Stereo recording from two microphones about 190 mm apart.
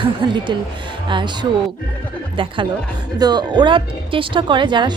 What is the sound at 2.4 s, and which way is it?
Speech, 25° right (ahead or behind).